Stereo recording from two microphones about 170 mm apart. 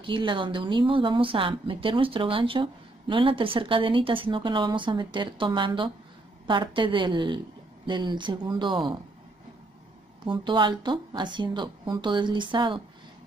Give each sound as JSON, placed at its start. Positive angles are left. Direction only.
{"t": 0.0, "sound": "a woman's voice", "side_deg": -30}
{"t": 10.2, "sound": "a woman's voice", "side_deg": -30}